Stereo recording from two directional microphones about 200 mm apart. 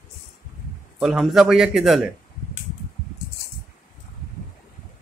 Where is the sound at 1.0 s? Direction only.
Centre (ahead or behind).